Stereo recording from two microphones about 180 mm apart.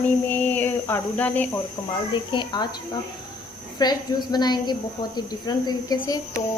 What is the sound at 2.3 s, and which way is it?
Speech, 25° left (ahead or behind).